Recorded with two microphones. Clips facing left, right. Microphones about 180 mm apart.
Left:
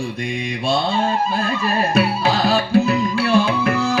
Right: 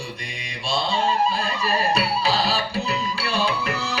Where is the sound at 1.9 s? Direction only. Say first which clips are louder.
Left 5 dB; 55° left (ahead or behind).